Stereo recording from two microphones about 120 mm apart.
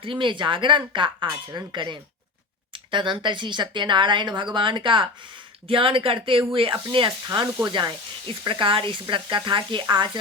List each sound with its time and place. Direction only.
0.0 s speech: 45° right (ahead or behind)